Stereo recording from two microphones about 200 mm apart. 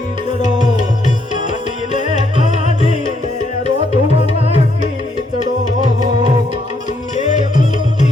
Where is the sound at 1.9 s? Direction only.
35° left (ahead or behind).